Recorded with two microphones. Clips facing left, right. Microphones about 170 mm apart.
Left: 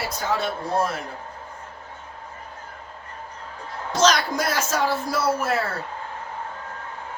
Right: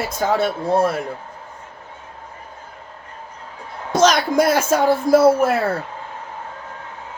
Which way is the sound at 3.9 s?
55° right (ahead or behind).